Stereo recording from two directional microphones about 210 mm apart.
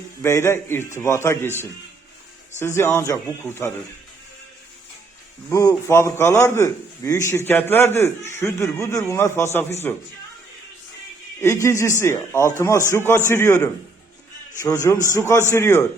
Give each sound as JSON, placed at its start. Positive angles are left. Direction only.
{"t": 0.2, "sound": "a man's voice", "side_deg": 10}
{"t": 5.5, "sound": "a man's voice", "side_deg": 15}
{"t": 11.3, "sound": "a man's voice", "side_deg": 15}